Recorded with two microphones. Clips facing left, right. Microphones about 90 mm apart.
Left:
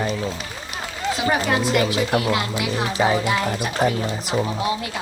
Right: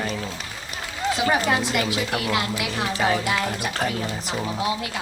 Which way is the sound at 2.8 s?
10° left (ahead or behind).